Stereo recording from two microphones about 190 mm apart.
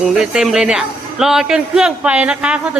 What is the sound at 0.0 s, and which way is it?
A woman's voice, 5° right (ahead or behind).